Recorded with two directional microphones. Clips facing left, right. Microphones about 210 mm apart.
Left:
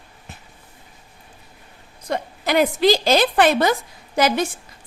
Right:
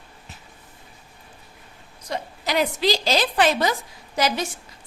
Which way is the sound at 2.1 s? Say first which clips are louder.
Left 5 dB; 55° left (ahead or behind).